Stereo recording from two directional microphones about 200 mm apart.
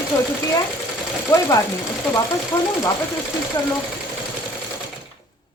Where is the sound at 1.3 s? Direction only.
15° left (ahead or behind).